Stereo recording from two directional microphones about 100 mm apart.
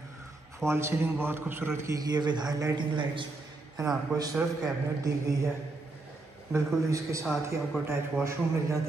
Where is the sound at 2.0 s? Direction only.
45° right (ahead or behind).